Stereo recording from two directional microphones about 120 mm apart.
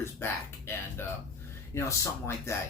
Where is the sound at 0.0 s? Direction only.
20° left (ahead or behind).